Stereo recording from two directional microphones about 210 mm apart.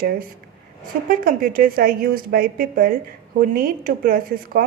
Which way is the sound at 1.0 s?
45° right (ahead or behind).